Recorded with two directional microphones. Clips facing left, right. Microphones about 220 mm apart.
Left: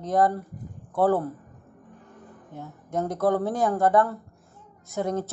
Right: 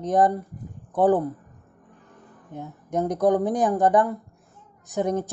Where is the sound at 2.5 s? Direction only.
20° right (ahead or behind).